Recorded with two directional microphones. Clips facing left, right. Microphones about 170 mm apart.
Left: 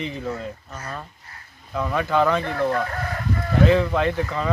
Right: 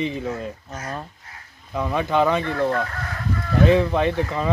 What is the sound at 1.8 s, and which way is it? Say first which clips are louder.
Speech: right 1 dB; 15° right (ahead or behind).